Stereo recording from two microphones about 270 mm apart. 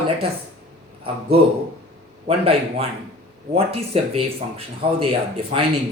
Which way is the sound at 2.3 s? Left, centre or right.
Right.